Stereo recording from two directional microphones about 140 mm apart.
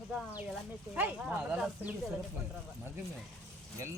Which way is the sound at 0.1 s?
5° right (ahead or behind).